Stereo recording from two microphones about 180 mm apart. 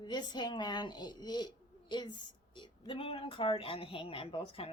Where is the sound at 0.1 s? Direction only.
25° left (ahead or behind).